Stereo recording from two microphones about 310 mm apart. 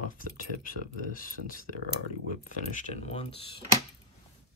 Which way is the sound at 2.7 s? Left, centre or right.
Left.